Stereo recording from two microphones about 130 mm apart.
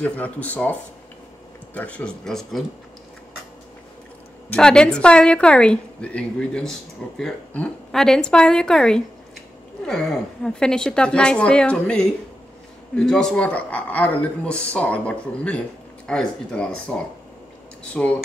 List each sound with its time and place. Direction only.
0.0 s a woman's voice: 10° left (ahead or behind)
4.5 s a woman's voice: 5° left (ahead or behind)
18.0 s a woman's voice: 10° left (ahead or behind)